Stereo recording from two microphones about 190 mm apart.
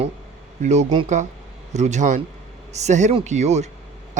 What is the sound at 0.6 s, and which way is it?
Speech, 35° right (ahead or behind).